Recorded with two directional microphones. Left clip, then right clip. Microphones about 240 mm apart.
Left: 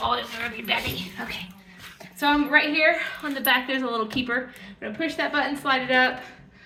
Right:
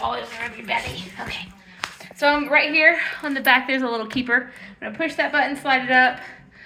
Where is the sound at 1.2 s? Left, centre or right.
Centre.